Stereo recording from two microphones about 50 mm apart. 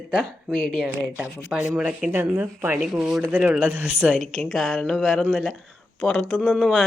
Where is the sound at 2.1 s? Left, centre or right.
Right.